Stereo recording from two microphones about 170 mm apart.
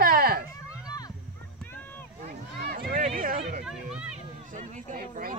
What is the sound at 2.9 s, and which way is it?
Speech, 55° right (ahead or behind).